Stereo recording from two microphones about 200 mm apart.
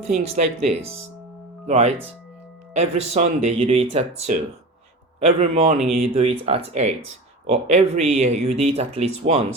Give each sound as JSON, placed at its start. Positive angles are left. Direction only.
{"t": 0.2, "sound": "speech", "side_deg": -30}